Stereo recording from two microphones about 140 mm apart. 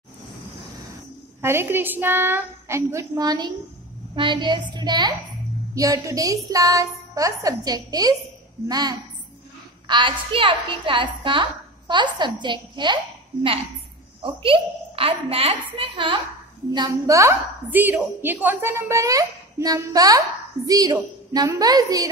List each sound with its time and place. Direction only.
1.4 s a child's voice: 15° right (ahead or behind); by 16.2 s 40° right (ahead or behind)
16.7 s a woman's voice: 25° right (ahead or behind)